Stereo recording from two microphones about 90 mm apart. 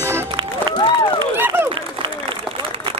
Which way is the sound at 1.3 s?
25° right (ahead or behind).